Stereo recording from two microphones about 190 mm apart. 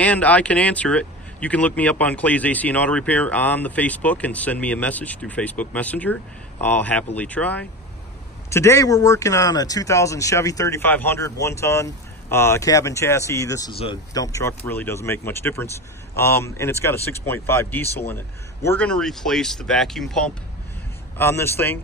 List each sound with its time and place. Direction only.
0.0 s speech: 5° left (ahead or behind)
21.2 s speech: 15° left (ahead or behind)